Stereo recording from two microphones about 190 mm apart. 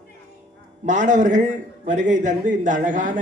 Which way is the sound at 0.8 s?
40° right (ahead or behind).